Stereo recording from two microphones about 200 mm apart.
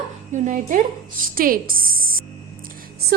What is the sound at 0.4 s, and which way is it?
A woman's voice, 40° right (ahead or behind).